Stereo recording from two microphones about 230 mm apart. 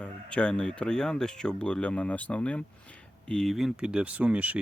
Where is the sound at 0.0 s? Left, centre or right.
Centre.